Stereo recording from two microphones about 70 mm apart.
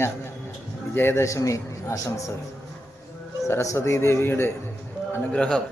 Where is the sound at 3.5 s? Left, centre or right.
Left.